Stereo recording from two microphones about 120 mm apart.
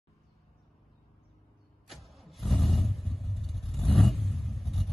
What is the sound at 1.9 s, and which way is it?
Vehicle, centre (ahead or behind).